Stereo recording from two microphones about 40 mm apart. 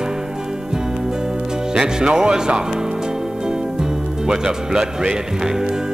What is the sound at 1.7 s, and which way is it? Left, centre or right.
Speech, centre.